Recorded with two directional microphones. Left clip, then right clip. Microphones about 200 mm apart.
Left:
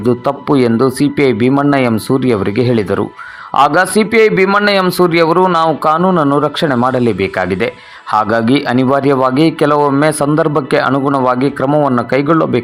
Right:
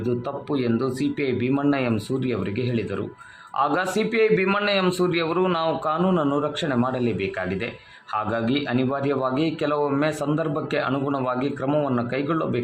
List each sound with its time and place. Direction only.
0.0 s speech: 40° left (ahead or behind)